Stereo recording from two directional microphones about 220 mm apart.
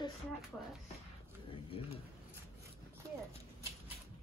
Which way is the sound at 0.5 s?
5° left (ahead or behind).